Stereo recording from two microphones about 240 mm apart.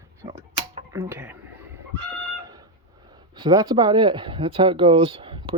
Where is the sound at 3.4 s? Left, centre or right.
Centre.